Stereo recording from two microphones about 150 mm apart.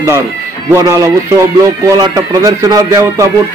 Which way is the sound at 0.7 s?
20° right (ahead or behind).